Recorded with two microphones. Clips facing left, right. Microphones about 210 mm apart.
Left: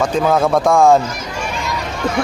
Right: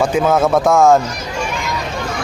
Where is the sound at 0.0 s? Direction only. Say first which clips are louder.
Right 1 dB; 5° right (ahead or behind).